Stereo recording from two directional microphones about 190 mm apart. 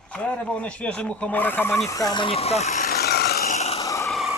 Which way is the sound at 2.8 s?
55° left (ahead or behind).